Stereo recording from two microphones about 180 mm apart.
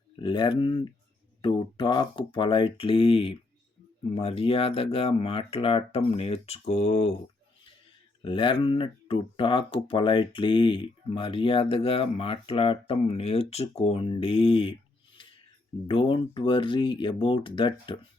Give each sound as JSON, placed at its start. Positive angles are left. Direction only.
{"t": 0.2, "sound": "speech", "side_deg": 25}
{"t": 8.2, "sound": "speech", "side_deg": 30}
{"t": 15.9, "sound": "speech", "side_deg": 30}